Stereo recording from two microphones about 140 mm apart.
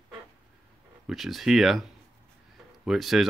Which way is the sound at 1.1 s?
Centre (ahead or behind).